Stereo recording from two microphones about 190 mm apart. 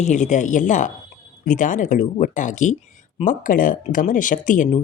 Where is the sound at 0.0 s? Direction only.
40° left (ahead or behind).